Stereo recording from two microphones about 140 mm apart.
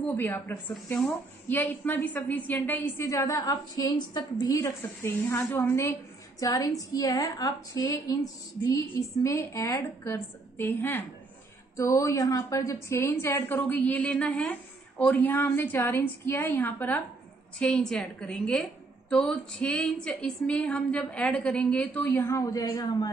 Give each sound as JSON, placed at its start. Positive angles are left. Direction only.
{"t": 0.0, "sound": "a woman's voice", "side_deg": 10}
{"t": 0.8, "sound": "speech", "side_deg": 5}
{"t": 1.5, "sound": "a woman's voice", "side_deg": 15}
{"t": 4.6, "sound": "a woman's voice", "side_deg": 20}